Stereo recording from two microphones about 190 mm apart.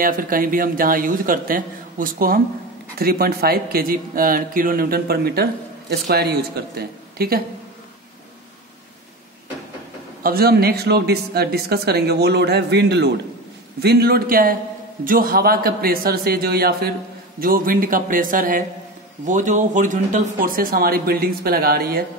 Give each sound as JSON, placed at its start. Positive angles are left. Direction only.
{"t": 0.0, "sound": "speech", "side_deg": -50}
{"t": 10.2, "sound": "speech", "side_deg": -55}